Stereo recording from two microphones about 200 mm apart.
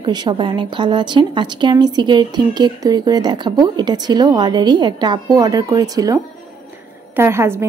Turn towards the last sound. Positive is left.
turn(degrees=-15)  # may be behind; listen again after turning